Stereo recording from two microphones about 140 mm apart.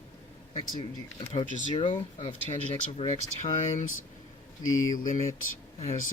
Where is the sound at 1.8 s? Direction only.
45° left (ahead or behind).